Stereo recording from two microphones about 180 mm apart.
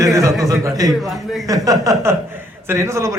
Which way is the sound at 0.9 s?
Centre (ahead or behind).